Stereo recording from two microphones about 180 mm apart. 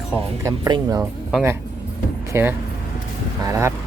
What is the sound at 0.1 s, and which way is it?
Speech, 15° right (ahead or behind).